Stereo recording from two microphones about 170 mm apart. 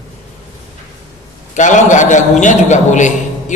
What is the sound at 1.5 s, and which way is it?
A man's voice, 45° left (ahead or behind).